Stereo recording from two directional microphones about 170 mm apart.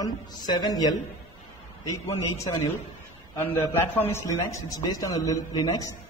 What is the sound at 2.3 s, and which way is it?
A man's voice, 20° left (ahead or behind).